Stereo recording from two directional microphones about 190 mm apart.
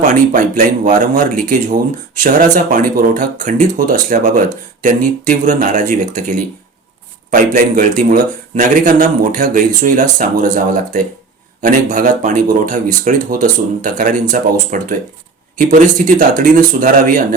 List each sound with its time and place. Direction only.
0.1 s speech: 45° right (ahead or behind)